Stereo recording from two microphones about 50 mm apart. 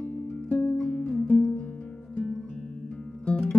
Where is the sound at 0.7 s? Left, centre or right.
Centre.